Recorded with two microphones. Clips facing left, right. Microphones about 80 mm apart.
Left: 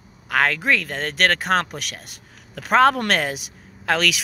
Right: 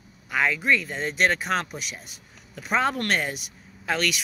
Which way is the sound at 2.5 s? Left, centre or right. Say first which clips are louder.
Left 8 dB; left.